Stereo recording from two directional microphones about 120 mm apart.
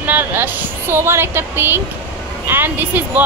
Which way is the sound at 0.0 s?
15° right (ahead or behind).